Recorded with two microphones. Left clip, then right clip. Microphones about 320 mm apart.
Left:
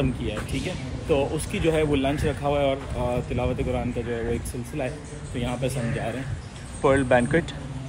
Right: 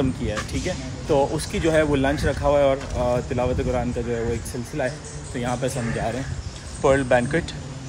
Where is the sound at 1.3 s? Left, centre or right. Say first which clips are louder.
Right 3 dB; right.